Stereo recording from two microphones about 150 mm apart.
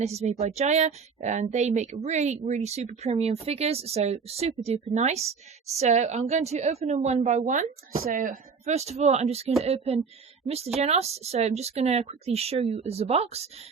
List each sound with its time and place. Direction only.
0.0 s a woman's voice: 45° right (ahead or behind)